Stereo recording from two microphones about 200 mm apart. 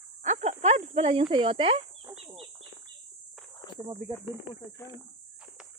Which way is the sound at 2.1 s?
15° right (ahead or behind).